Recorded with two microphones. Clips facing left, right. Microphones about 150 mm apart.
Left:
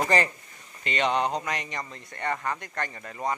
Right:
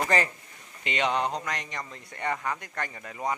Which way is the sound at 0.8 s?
10° right (ahead or behind).